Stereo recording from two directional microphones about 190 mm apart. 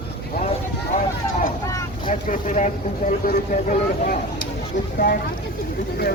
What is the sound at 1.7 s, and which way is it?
Vehicle, 15° left (ahead or behind).